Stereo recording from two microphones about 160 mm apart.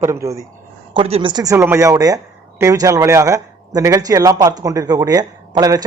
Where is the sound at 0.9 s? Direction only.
35° right (ahead or behind).